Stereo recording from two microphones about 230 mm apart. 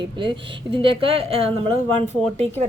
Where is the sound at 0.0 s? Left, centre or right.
Right.